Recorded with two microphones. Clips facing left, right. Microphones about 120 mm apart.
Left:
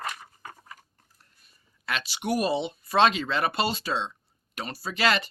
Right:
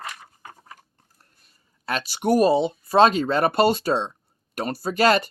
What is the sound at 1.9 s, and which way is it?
Speech, 45° right (ahead or behind).